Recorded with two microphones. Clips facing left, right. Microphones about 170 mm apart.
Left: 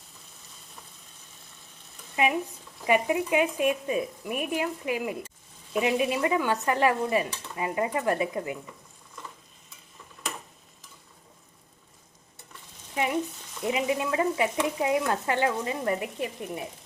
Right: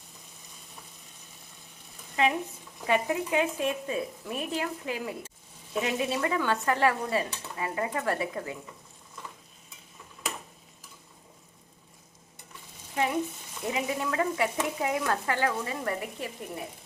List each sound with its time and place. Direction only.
2.2 s dishes: 15° left (ahead or behind)
13.0 s speech: 15° left (ahead or behind)